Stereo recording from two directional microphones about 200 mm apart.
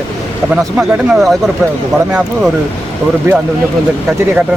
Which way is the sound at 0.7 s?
Centre (ahead or behind).